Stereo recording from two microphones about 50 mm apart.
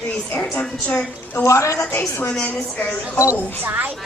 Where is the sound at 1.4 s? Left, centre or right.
Left.